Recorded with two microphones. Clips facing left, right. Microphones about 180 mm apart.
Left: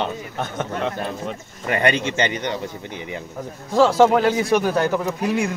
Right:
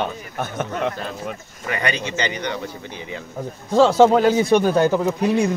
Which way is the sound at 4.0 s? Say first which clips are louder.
Right 2 dB; 20° right (ahead or behind).